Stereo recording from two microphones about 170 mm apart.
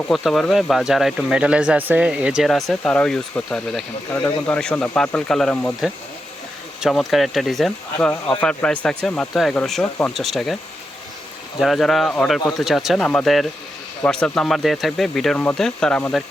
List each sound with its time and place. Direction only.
0.1 s speech: centre (ahead or behind)
11.6 s speech: centre (ahead or behind)